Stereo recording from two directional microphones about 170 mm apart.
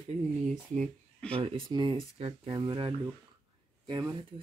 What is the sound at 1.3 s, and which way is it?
Speech, 35° right (ahead or behind).